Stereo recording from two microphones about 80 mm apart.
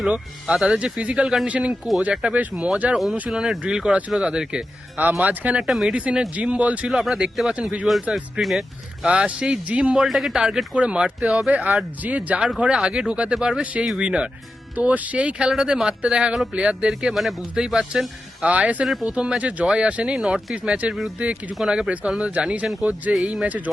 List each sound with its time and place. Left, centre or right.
0.1 s speech: centre
2.0 s speech: centre
3.2 s speech: centre
5.6 s speech: centre
8.1 s speech: centre
9.0 s speech: centre
10.1 s speech: centre
18.4 s speech: centre